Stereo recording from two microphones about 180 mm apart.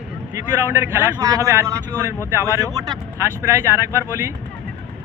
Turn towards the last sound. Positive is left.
turn(degrees=-15)  # may be behind; listen again after turning